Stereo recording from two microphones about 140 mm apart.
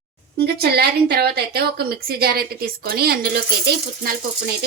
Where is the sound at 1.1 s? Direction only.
90° right.